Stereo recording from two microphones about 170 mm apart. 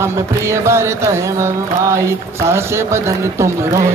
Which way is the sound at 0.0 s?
15° right (ahead or behind).